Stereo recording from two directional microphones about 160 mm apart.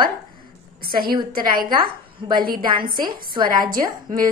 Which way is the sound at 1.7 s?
25° right (ahead or behind).